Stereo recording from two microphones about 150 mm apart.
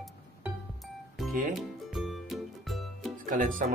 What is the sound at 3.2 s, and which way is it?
Speech, 65° right (ahead or behind).